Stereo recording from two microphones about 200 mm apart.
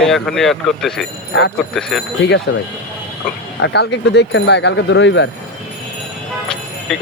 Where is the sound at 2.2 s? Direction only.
60° left (ahead or behind).